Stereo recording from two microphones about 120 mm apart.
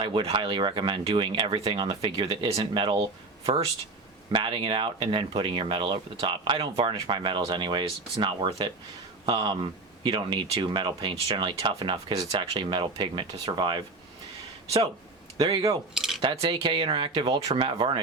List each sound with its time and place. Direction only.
0.0 s speech: 50° right (ahead or behind)
3.4 s speech: 55° right (ahead or behind)
4.3 s speech: 45° right (ahead or behind)
16.0 s a sound: 5° right (ahead or behind)
16.2 s speech: 50° right (ahead or behind)